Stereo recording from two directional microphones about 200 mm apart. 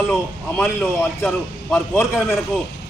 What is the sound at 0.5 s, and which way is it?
A man's voice, 10° left (ahead or behind).